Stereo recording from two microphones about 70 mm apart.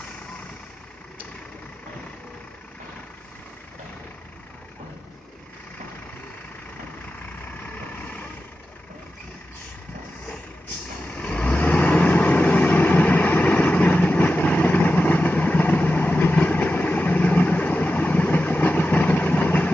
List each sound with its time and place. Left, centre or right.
11.1 s vehicle: centre